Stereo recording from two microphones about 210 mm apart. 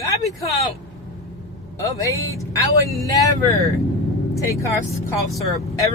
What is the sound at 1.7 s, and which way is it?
Speech, 15° left (ahead or behind).